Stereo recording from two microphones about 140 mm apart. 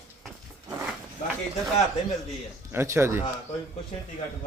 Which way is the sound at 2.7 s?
15° right (ahead or behind).